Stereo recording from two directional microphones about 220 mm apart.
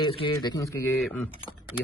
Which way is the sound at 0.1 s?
25° left (ahead or behind).